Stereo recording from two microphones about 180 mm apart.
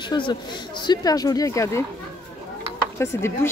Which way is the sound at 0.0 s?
25° left (ahead or behind).